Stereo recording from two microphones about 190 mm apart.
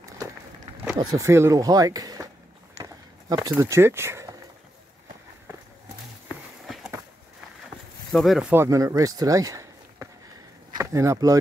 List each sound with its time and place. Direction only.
0.9 s speech: 15° right (ahead or behind)
2.8 s a sound: 20° right (ahead or behind)
8.1 s speech: centre (ahead or behind); by 11.3 s 15° right (ahead or behind)